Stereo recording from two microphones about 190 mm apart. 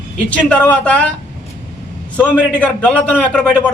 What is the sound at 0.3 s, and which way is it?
Speech, 5° left (ahead or behind).